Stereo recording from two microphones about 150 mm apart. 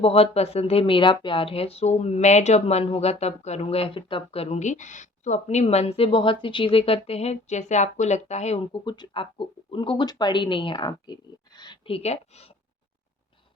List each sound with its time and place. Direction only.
0.0 s speech: 40° left (ahead or behind)
8.7 s speech: 30° left (ahead or behind); by 12.5 s 45° left (ahead or behind)